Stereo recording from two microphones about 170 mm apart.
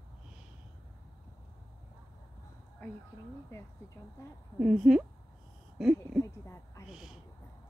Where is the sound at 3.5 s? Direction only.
15° left (ahead or behind).